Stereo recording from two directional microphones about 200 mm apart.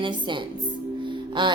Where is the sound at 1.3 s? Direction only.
25° right (ahead or behind).